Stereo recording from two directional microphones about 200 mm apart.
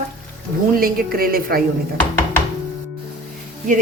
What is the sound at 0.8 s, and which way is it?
Speech, 45° right (ahead or behind).